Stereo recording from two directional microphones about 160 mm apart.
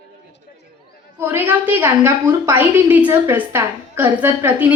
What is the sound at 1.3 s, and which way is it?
A woman's voice, 10° right (ahead or behind).